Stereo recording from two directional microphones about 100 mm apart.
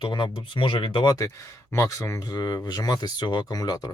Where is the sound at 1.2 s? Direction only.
30° left (ahead or behind).